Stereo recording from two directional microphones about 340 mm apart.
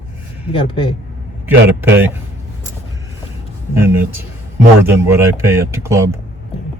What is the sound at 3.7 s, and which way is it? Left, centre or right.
Speech, centre.